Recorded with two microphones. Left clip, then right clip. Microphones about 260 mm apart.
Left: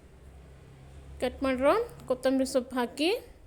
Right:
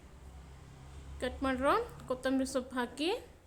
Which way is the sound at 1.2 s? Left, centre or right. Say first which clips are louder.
Left 6 dB; centre.